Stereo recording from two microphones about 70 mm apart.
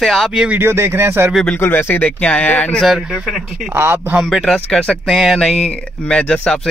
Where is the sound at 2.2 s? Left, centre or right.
Centre.